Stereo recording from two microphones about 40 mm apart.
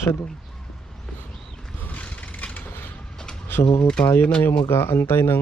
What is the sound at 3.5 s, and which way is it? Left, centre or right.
Speech, left.